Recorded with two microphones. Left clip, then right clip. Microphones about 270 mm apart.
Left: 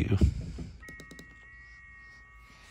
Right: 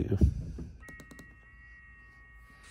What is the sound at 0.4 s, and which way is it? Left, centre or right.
Music, left.